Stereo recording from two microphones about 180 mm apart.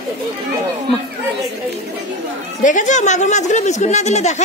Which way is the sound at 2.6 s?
45° left (ahead or behind).